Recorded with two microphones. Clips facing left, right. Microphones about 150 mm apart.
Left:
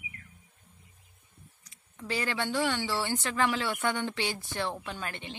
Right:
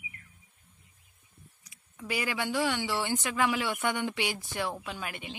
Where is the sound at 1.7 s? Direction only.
10° right (ahead or behind).